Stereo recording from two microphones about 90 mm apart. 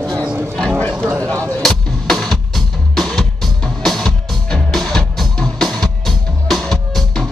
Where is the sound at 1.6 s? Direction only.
5° left (ahead or behind).